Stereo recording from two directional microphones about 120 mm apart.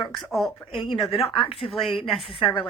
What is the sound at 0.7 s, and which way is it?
Speech, 50° left (ahead or behind).